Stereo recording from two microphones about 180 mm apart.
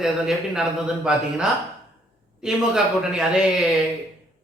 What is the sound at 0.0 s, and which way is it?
Speech, 5° right (ahead or behind).